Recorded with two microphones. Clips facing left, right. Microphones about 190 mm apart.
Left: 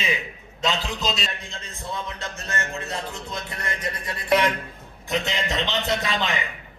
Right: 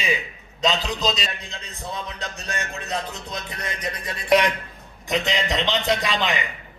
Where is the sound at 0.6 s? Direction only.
20° right (ahead or behind).